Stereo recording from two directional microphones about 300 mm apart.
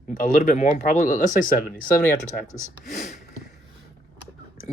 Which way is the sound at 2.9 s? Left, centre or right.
Left.